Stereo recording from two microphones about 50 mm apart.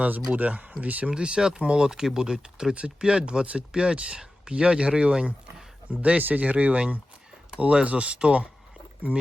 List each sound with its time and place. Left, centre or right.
0.0 s speech: right
1.1 s speech: centre